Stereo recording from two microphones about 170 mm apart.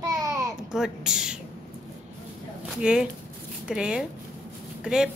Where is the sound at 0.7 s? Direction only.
5° right (ahead or behind).